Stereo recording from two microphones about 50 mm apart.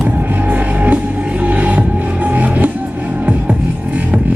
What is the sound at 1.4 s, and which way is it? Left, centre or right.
Music, right.